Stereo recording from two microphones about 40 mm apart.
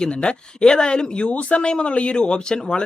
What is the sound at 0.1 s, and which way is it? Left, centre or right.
Speech, left.